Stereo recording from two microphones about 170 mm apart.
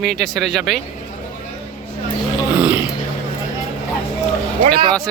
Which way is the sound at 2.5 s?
10° right (ahead or behind).